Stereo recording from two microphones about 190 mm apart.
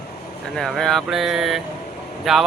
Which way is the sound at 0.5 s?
Centre (ahead or behind).